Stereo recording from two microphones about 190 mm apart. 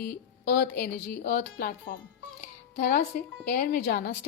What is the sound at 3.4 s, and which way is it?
Speech, 50° left (ahead or behind).